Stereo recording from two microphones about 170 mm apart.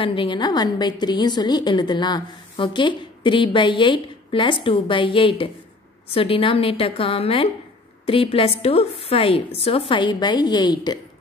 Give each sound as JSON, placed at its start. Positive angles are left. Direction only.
{"t": 0.0, "sound": "a woman's voice", "side_deg": 30}